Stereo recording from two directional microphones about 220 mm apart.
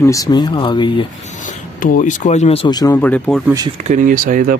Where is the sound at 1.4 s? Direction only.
35° left (ahead or behind); by 3.5 s centre (ahead or behind).